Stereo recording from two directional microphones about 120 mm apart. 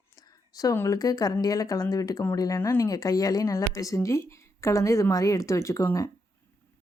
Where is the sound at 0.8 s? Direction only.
30° left (ahead or behind).